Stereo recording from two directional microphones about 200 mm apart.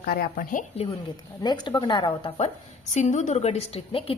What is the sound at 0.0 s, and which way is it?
Speech, 45° left (ahead or behind).